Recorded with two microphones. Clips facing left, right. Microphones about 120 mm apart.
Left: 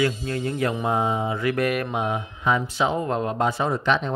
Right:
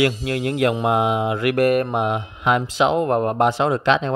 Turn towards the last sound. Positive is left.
turn(degrees=-90)